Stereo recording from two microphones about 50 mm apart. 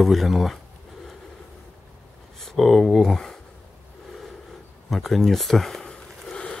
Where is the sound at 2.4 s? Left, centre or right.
Centre.